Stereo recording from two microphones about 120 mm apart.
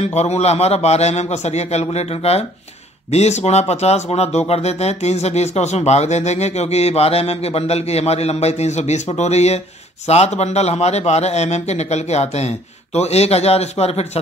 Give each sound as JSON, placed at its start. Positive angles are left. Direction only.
{"t": 0.0, "sound": "speech", "side_deg": 65}